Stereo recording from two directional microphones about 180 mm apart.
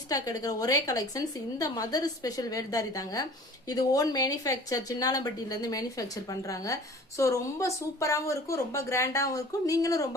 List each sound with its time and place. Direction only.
0.1 s a woman's voice: 20° left (ahead or behind)